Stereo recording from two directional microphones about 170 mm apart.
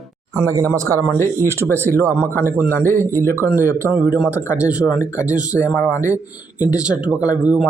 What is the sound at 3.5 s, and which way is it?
Speech, 10° right (ahead or behind).